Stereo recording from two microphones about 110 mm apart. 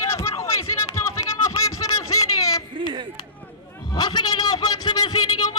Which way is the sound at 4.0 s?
40° left (ahead or behind).